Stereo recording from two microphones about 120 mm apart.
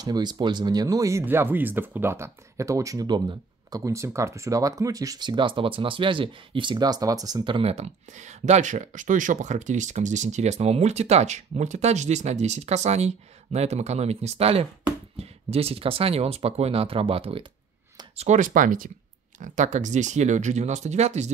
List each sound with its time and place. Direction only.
0.0 s speech: 35° right (ahead or behind)
1.2 s speech: 15° right (ahead or behind); by 7.6 s 40° right (ahead or behind)
7.6 s speech: 65° right (ahead or behind)
18.1 s speech: 75° right (ahead or behind)
19.4 s speech: 90° right; by 21.3 s 70° right (ahead or behind)